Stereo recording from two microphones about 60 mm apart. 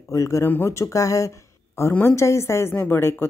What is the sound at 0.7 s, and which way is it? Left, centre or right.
A woman's voice, left.